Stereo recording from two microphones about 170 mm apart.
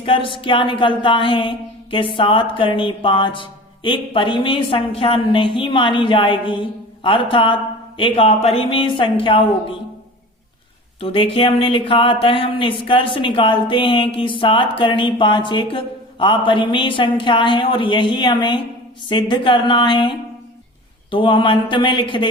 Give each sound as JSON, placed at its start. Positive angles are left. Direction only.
{"t": 0.0, "sound": "a woman's voice", "side_deg": 30}
{"t": 11.0, "sound": "a woman's voice", "side_deg": 35}